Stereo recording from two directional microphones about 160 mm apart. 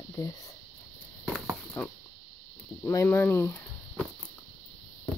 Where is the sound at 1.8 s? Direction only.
15° left (ahead or behind).